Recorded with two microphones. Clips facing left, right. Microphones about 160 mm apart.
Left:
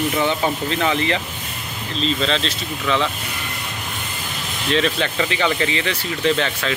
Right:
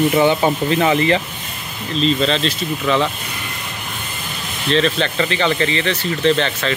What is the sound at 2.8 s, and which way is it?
Speech, 35° right (ahead or behind).